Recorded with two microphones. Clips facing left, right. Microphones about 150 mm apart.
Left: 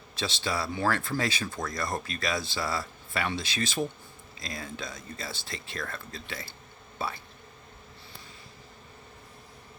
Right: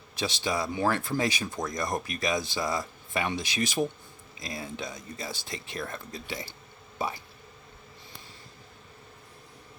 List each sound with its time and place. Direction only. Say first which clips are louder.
0.2 s speech: right 2 dB; 15° right (ahead or behind)